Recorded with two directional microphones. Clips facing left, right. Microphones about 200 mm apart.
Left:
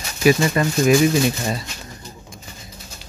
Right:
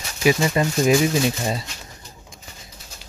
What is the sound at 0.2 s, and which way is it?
Speech, 20° right (ahead or behind).